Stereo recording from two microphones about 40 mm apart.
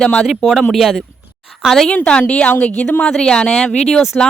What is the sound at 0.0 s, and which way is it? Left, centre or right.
Speech, left.